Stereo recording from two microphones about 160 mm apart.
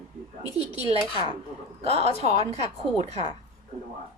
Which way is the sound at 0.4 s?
30° left (ahead or behind).